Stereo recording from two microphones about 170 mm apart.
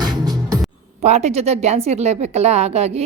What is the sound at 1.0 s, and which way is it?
A woman's voice, 40° right (ahead or behind).